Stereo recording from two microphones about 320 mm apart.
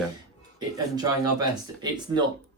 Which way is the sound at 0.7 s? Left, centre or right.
Centre.